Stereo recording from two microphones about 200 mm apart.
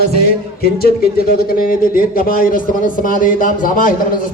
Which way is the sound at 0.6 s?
50° left (ahead or behind).